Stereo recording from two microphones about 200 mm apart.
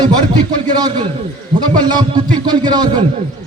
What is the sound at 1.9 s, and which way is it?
A man's voice, 20° right (ahead or behind).